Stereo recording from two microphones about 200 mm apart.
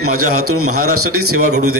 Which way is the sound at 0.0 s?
90° right.